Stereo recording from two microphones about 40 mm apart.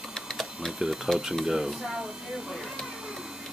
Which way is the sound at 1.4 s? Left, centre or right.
Centre.